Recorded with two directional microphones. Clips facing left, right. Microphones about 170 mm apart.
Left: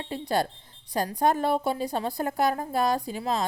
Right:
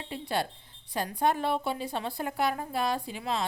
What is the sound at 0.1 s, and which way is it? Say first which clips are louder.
Speech: left 5 dB; 40° left (ahead or behind).